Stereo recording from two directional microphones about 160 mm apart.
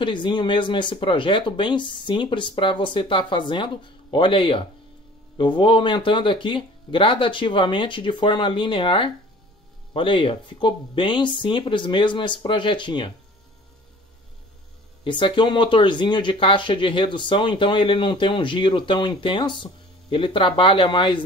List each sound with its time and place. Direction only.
0.0 s speech: 30° left (ahead or behind)
15.0 s speech: 30° left (ahead or behind)